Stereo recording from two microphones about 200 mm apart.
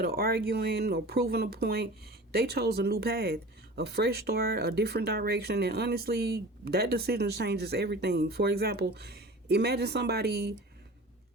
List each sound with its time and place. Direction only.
0.0 s speech: 50° right (ahead or behind)